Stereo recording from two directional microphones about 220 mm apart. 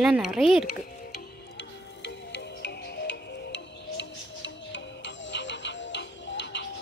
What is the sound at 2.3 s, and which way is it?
Music, 55° left (ahead or behind).